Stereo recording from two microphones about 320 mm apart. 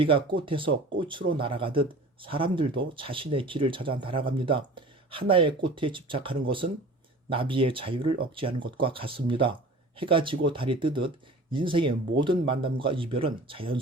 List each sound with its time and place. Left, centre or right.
0.0 s speech: centre